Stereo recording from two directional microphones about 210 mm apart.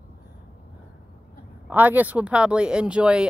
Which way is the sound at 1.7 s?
10° right (ahead or behind).